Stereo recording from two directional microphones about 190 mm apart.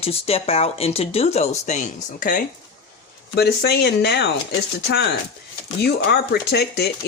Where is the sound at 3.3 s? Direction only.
55° left (ahead or behind).